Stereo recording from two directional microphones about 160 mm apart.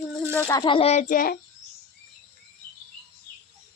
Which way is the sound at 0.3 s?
20° left (ahead or behind).